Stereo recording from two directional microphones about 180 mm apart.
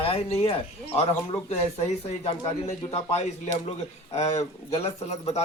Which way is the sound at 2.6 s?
40° left (ahead or behind).